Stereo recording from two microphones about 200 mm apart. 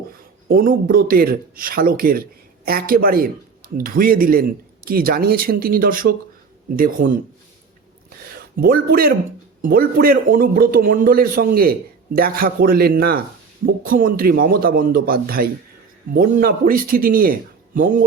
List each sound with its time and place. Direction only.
0.4 s a man's voice: 45° right (ahead or behind)
8.5 s a man's voice: 45° right (ahead or behind)